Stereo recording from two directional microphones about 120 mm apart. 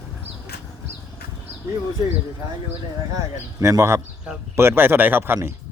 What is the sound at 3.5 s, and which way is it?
Speech, 25° right (ahead or behind).